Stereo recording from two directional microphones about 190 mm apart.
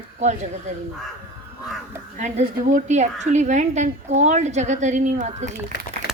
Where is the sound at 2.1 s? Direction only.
35° right (ahead or behind).